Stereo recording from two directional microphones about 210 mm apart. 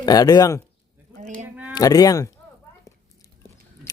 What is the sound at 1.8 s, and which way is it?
Speech, 15° left (ahead or behind).